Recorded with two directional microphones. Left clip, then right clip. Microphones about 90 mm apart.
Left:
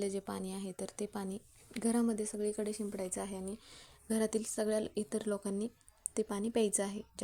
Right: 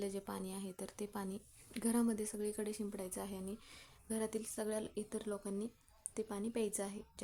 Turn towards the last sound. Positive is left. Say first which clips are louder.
# left 6 dB
turn(degrees=50)  # may be behind; listen again after turning